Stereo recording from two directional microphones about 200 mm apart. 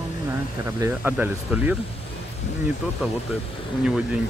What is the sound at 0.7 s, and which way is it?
Speech, 15° right (ahead or behind).